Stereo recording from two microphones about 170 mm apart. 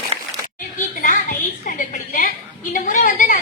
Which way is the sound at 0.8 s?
50° left (ahead or behind).